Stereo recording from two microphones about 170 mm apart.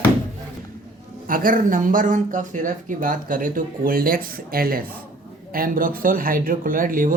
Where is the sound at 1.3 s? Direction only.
55° right (ahead or behind).